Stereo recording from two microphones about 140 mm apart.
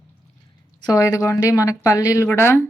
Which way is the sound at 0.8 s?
25° left (ahead or behind).